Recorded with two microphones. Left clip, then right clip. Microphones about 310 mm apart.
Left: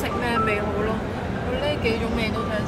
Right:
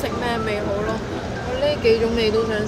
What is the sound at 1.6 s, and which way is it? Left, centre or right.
Speech, right.